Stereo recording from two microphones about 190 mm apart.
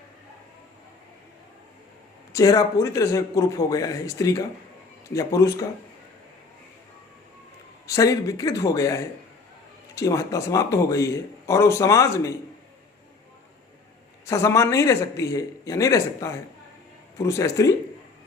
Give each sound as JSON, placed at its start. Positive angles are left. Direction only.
{"t": 2.3, "sound": "a man's voice", "side_deg": 20}
{"t": 7.9, "sound": "a man's voice", "side_deg": 15}
{"t": 14.3, "sound": "a man's voice", "side_deg": 15}